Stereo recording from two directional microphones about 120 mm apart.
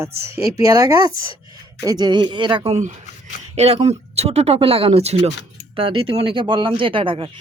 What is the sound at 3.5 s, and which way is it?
Speech, 60° right (ahead or behind).